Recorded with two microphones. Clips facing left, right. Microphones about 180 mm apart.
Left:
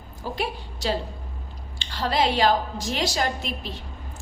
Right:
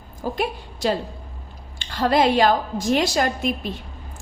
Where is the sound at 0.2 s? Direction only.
50° right (ahead or behind).